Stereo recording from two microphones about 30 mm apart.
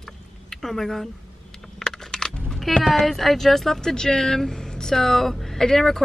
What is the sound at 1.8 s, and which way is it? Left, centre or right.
Coin, centre.